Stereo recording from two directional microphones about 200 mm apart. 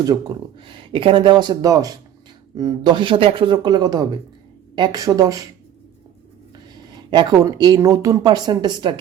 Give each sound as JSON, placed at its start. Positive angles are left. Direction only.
{"t": 0.0, "sound": "speech", "side_deg": -20}
{"t": 7.1, "sound": "speech", "side_deg": -20}